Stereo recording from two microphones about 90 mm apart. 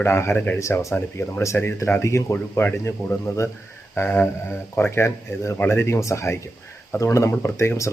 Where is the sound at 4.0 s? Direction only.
30° left (ahead or behind).